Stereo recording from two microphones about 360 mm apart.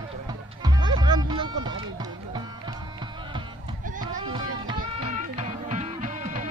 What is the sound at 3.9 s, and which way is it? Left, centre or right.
Music, centre.